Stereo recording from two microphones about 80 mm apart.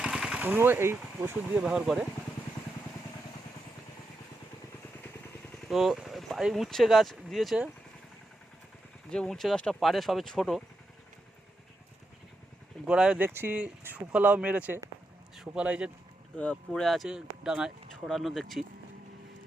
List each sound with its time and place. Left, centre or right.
0.0 s a sound: centre
0.3 s speech: right
1.6 s speech: centre
5.6 s speech: centre
9.0 s speech: centre
12.9 s speech: centre
13.2 s speech: right
16.4 s speech: centre
16.8 s speech: centre